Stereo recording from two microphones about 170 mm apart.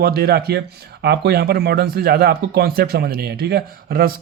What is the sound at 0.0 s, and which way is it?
Speech, 65° right (ahead or behind).